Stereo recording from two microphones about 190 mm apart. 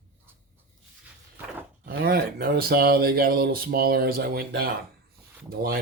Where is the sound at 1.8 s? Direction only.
55° right (ahead or behind).